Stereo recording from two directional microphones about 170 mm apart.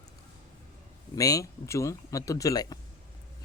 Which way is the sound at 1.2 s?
20° left (ahead or behind).